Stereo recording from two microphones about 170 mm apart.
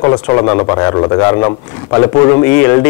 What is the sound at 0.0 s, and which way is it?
Speech, 25° left (ahead or behind).